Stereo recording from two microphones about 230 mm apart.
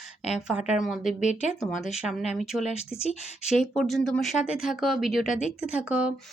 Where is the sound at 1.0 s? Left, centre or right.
Left.